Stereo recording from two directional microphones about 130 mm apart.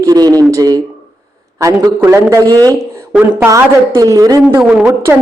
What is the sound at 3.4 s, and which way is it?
A man's voice, 25° right (ahead or behind).